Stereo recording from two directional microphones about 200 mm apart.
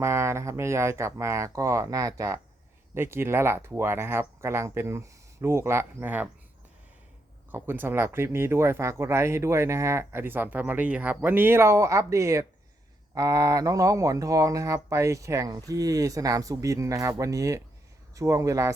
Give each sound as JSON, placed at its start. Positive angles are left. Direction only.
{"t": 0.0, "sound": "speech", "side_deg": -15}
{"t": 7.5, "sound": "speech", "side_deg": -10}